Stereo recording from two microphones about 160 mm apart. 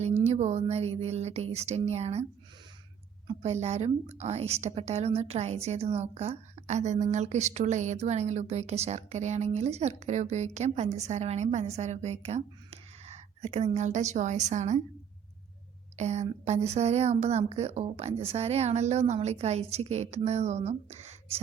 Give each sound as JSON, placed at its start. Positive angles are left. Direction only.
{"t": 0.0, "sound": "a woman's voice", "side_deg": -45}
{"t": 3.4, "sound": "a woman's voice", "side_deg": -40}
{"t": 16.0, "sound": "a woman's voice", "side_deg": -45}